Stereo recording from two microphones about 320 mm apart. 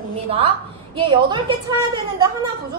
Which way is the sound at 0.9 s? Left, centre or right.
Centre.